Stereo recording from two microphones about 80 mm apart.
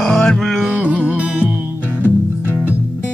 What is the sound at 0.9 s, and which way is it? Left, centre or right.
Music, centre.